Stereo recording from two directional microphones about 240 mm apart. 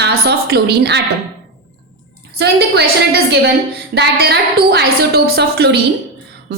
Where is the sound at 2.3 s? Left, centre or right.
Right.